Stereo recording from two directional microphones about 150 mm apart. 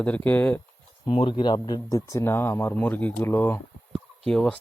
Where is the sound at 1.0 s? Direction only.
35° left (ahead or behind).